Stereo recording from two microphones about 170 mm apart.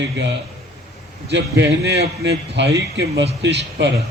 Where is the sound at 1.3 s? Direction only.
90° right.